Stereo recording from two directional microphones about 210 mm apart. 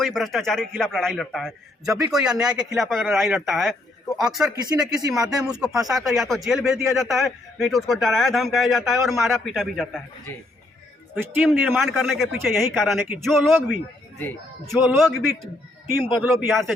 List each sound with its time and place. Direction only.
0.0 s a man's voice: centre (ahead or behind)
11.1 s a man's voice: 5° right (ahead or behind)
16.2 s a man's voice: centre (ahead or behind)